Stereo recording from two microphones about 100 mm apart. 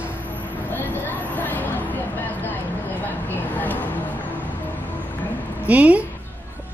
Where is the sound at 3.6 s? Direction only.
20° left (ahead or behind).